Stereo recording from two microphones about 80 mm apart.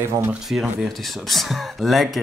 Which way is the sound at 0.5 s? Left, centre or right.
Centre.